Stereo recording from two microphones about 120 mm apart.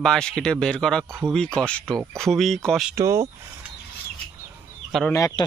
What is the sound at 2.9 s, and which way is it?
Speech, 25° right (ahead or behind).